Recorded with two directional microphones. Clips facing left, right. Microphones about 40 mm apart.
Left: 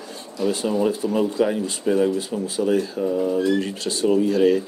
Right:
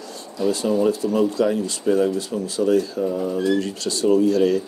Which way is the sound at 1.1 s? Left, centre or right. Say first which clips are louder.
Right 1 dB; centre.